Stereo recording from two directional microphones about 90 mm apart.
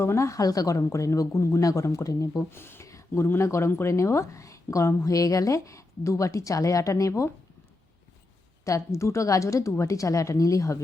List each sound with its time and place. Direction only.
0.0 s speech: 30° left (ahead or behind)
2.5 s speech: 25° left (ahead or behind)
8.6 s speech: 35° left (ahead or behind)